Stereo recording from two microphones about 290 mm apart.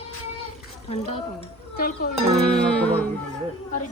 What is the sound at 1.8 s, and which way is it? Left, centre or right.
Speech, left.